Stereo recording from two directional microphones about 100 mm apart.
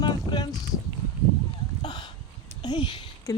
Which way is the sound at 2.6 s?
50° left (ahead or behind).